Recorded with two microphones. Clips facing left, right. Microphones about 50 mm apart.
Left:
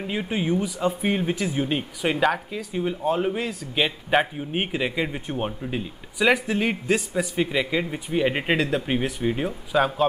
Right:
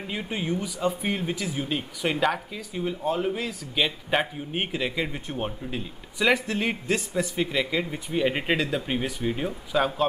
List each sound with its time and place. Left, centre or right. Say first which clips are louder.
0.0 s speech: left 4 dB; centre